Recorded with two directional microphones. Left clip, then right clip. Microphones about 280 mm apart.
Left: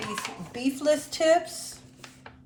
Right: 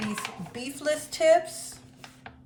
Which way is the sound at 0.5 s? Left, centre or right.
Centre.